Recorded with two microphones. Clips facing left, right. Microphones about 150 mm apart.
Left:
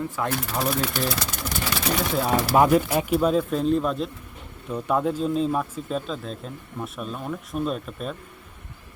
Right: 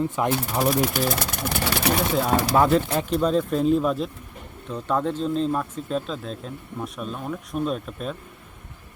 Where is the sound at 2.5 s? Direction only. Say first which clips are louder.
Left 3 dB; 10° left (ahead or behind).